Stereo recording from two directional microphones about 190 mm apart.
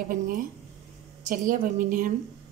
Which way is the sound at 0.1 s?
45° right (ahead or behind).